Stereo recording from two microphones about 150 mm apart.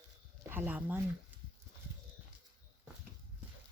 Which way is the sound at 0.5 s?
10° right (ahead or behind).